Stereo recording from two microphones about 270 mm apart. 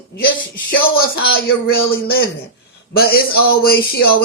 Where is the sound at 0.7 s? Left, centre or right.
Left.